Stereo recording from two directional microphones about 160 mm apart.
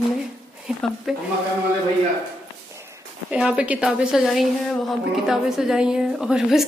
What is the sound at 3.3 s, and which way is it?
A woman's voice, 5° right (ahead or behind).